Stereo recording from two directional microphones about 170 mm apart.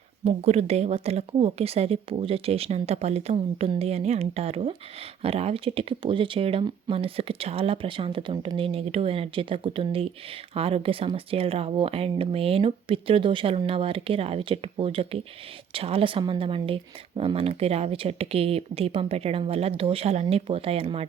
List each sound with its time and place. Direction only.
0.3 s speech: 40° right (ahead or behind)